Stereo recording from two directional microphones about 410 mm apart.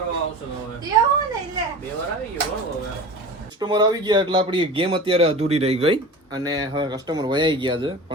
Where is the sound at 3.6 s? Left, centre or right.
Centre.